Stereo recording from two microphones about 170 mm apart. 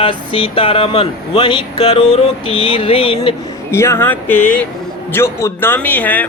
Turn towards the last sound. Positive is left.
turn(degrees=10)  # may be behind; listen again after turning